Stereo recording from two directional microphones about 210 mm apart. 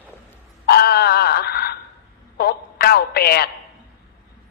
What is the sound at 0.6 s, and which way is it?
Wail, 50° left (ahead or behind).